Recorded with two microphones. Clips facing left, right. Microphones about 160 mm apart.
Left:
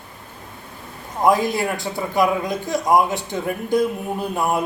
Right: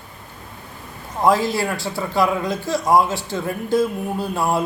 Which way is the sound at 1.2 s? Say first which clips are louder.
Even; 20° left (ahead or behind).